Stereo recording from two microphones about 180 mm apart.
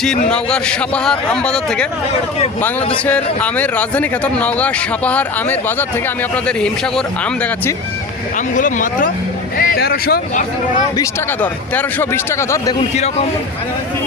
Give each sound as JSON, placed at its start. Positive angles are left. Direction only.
{"t": 0.0, "sound": "a man's voice", "side_deg": 5}
{"t": 3.1, "sound": "a man's voice", "side_deg": 10}
{"t": 8.5, "sound": "speech", "side_deg": 45}
{"t": 9.6, "sound": "speech", "side_deg": 55}
{"t": 10.9, "sound": "speech", "side_deg": 15}